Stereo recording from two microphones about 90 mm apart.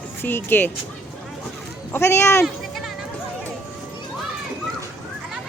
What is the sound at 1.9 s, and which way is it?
Speech, 25° left (ahead or behind).